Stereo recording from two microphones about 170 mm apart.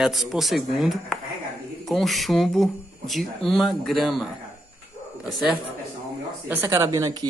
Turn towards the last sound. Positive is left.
turn(degrees=-20)  # may be behind; listen again after turning